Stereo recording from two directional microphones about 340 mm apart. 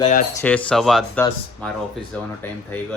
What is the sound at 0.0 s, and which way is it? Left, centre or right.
Speech, left.